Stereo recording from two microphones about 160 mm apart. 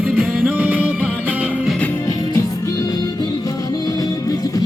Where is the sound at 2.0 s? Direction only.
25° left (ahead or behind).